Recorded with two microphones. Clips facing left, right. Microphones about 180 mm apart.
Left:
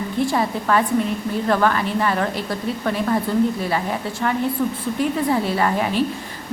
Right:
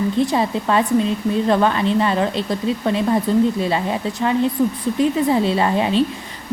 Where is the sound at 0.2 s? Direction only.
20° right (ahead or behind).